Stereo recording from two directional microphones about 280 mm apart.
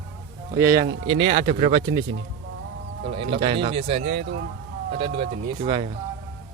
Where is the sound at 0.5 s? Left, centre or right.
Centre.